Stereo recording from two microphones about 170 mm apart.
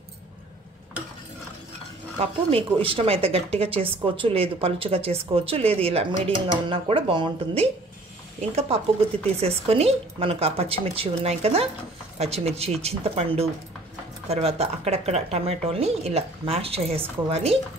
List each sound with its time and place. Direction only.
2.1 s speech: 35° right (ahead or behind)